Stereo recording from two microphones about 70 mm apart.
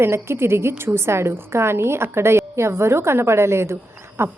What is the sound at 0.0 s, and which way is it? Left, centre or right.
A woman's voice, right.